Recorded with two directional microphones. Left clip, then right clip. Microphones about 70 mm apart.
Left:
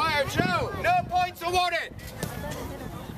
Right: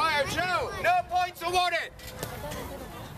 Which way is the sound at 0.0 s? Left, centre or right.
Centre.